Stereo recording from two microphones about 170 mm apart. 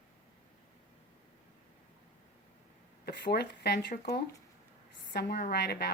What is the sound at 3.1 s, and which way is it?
A woman's voice, 85° left.